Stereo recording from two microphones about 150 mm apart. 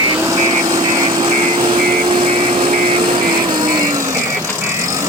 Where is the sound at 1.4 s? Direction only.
35° right (ahead or behind).